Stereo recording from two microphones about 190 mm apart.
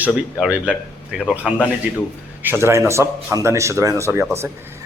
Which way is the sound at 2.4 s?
10° right (ahead or behind).